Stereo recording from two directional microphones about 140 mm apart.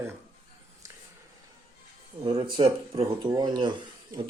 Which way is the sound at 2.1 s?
35° right (ahead or behind).